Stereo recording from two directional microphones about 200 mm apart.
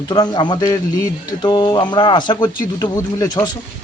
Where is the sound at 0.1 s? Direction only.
20° left (ahead or behind).